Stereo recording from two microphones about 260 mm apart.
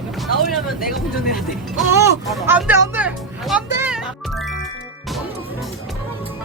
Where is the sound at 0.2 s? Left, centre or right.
Centre.